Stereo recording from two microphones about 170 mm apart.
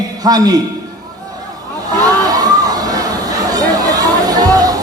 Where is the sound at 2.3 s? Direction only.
20° right (ahead or behind).